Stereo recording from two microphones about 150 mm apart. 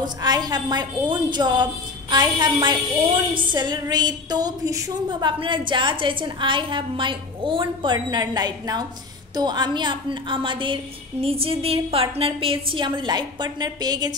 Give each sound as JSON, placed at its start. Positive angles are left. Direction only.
{"t": 0.0, "sound": "a woman's voice", "side_deg": -25}